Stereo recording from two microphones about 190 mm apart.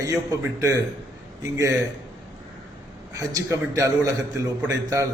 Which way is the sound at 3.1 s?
15° right (ahead or behind).